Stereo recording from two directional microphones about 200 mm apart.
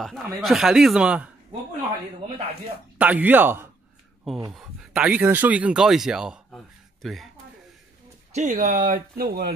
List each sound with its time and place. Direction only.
0.0 s speech: centre (ahead or behind)
3.0 s speech: 10° right (ahead or behind)
8.4 s speech: 40° right (ahead or behind)